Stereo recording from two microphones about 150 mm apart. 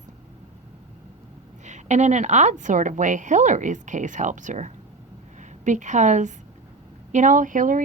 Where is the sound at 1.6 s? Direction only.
50° right (ahead or behind).